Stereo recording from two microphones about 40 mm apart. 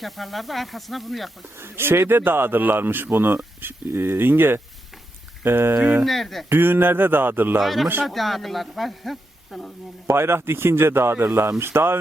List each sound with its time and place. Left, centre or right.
0.0 s speech: centre
1.5 s speech: right
5.5 s speech: right
6.1 s speech: centre
6.5 s a sound: right
7.6 s speech: centre
10.2 s speech: right